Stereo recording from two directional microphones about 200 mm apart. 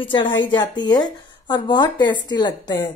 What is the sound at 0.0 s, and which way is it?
A woman's voice, 25° left (ahead or behind).